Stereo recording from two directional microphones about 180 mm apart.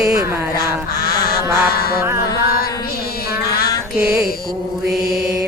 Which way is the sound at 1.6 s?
55° left (ahead or behind).